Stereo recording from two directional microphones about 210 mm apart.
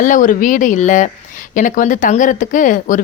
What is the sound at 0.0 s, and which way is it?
Speech, 40° left (ahead or behind).